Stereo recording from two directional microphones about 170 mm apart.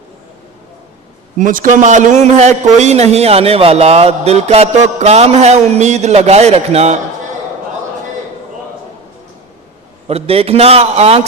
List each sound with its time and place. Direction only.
1.4 s a man's voice: 50° right (ahead or behind)
10.1 s a man's voice: 35° right (ahead or behind)